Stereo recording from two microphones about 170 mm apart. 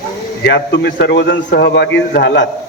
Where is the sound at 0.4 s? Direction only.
90° left.